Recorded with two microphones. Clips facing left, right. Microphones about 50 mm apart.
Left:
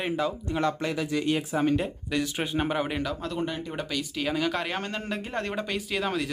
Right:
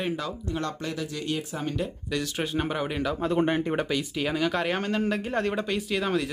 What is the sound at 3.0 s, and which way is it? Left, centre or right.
Speech, centre.